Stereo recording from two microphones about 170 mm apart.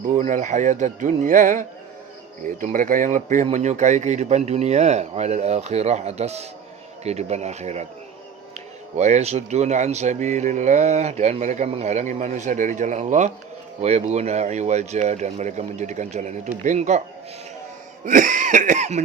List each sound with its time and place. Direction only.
0.2 s speech: 50° right (ahead or behind)
18.0 s cough: 50° right (ahead or behind)